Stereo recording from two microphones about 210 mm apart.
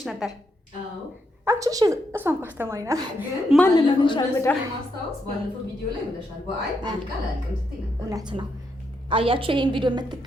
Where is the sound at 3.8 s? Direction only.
20° left (ahead or behind).